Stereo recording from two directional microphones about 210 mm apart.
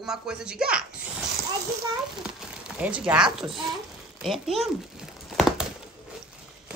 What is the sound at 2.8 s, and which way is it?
Speech, 5° right (ahead or behind).